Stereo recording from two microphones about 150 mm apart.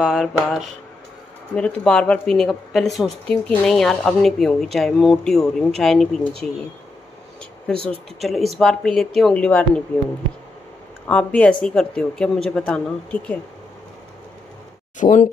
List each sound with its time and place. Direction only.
0.0 s speech: 5° right (ahead or behind)
7.8 s speech: centre (ahead or behind)
11.1 s speech: 10° left (ahead or behind)
15.0 s speech: 55° left (ahead or behind)